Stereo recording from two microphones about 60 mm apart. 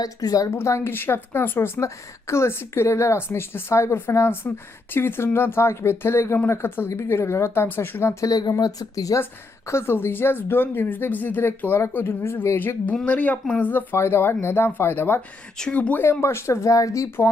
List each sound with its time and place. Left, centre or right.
0.0 s a woman's voice: left
0.9 s speech: left
1.8 s a woman's voice: left
8.2 s speech: left
9.6 s speech: left
13.1 s speech: left
13.9 s speech: left
15.7 s speech: left
16.2 s a woman's voice: left
16.6 s speech: left